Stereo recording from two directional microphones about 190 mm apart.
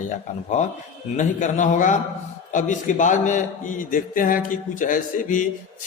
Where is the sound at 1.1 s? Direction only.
40° left (ahead or behind).